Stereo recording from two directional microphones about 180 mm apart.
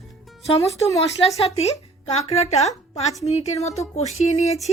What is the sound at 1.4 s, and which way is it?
A woman's voice, 35° left (ahead or behind).